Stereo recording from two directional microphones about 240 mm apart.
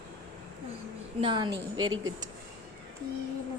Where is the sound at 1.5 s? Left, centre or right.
Right.